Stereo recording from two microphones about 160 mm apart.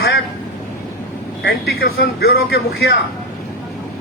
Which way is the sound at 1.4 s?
90° left.